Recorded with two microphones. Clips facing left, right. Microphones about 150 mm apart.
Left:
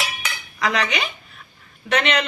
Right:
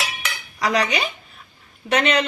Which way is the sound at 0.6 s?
40° right (ahead or behind).